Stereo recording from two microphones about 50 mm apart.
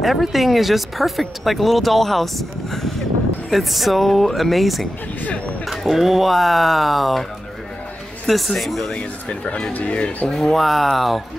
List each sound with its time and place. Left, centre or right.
0.0 s speech: centre
8.3 s speech: centre
8.9 s speech: left
10.3 s speech: centre